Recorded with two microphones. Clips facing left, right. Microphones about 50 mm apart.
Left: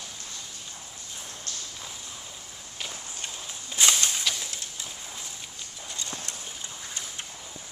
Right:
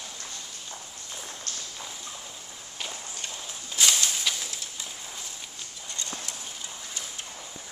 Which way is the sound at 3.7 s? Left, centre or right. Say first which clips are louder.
Left 1 dB; centre.